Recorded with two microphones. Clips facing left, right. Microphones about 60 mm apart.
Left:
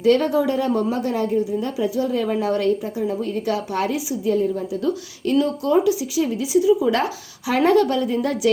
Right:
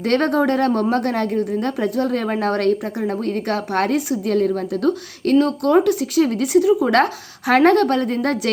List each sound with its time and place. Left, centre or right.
0.0 s a woman's voice: right